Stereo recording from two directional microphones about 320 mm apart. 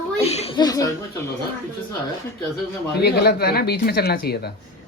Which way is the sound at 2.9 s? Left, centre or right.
Left.